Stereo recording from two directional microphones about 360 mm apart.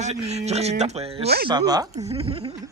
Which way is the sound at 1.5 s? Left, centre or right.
Centre.